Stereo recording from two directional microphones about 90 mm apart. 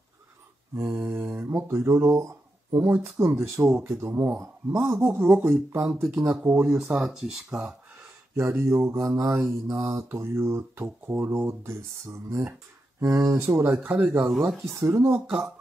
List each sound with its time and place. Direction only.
0.7 s mantra: 30° right (ahead or behind)
1.1 s speech: 25° right (ahead or behind)
1.7 s speech: 35° right (ahead or behind)
3.2 s mantra: 30° right (ahead or behind)
5.0 s speech: 25° right (ahead or behind)
6.7 s speech: 5° right (ahead or behind)
8.4 s mantra: 30° right (ahead or behind)
13.0 s speech: 35° right (ahead or behind); by 14.3 s 15° right (ahead or behind)
14.6 s mantra: 30° right (ahead or behind)